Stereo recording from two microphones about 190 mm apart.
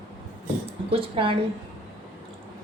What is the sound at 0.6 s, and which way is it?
Speech, 30° right (ahead or behind).